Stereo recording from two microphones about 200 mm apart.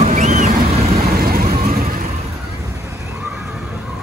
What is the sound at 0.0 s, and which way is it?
Boat, 40° right (ahead or behind).